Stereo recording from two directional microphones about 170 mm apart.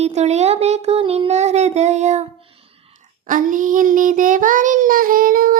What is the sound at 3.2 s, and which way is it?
Child singing, 50° right (ahead or behind).